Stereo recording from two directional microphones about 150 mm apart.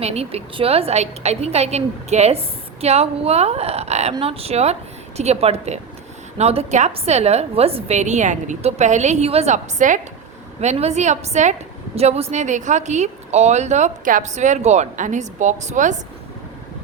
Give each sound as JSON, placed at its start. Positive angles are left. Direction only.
{"t": 0.0, "sound": "a woman's voice", "side_deg": -45}